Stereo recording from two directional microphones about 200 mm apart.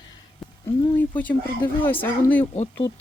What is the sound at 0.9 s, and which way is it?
Speech, 10° left (ahead or behind).